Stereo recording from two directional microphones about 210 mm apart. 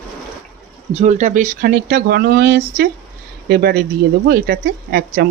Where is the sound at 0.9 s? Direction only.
35° right (ahead or behind).